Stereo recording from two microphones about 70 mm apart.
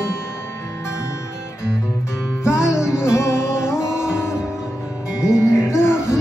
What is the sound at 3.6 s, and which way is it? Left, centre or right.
Music, centre.